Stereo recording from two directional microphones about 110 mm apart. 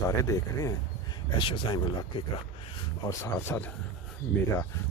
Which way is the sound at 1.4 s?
50° left (ahead or behind).